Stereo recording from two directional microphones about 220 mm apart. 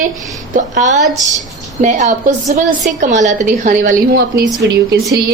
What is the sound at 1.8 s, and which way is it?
A woman's voice, 35° right (ahead or behind).